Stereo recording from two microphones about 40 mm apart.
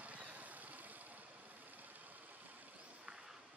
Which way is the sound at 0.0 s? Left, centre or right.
Right.